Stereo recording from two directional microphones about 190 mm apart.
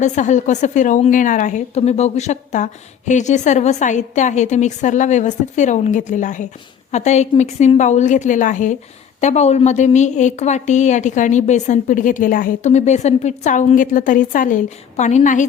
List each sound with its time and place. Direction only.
0.0 s a woman's voice: 40° left (ahead or behind)